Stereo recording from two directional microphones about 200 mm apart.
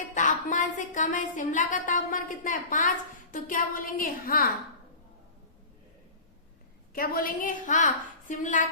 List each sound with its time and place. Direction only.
0.1 s a woman's voice: 40° left (ahead or behind)
6.9 s a woman's voice: 45° left (ahead or behind)